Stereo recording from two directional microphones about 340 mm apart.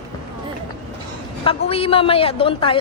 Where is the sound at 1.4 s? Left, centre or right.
Centre.